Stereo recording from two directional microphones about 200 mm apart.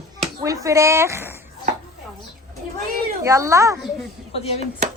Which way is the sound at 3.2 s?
15° right (ahead or behind).